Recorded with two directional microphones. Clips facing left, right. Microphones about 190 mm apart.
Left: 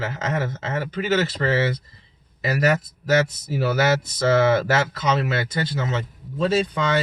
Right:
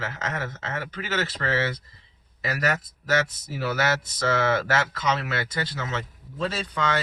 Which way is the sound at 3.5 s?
25° left (ahead or behind).